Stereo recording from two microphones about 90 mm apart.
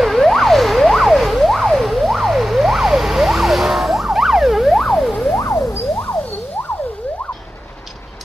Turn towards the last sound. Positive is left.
turn(degrees=20)  # may be behind; listen again after turning